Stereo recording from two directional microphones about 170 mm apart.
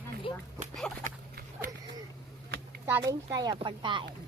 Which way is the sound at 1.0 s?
55° right (ahead or behind).